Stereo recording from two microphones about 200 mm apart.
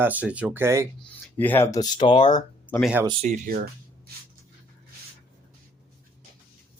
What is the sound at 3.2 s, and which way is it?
Speech, 40° right (ahead or behind).